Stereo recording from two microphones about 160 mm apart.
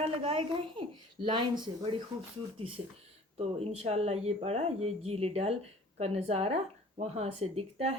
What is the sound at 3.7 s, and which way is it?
Speech, 40° right (ahead or behind).